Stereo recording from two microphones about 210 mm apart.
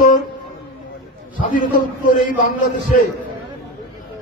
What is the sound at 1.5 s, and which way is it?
A man's voice, 40° left (ahead or behind).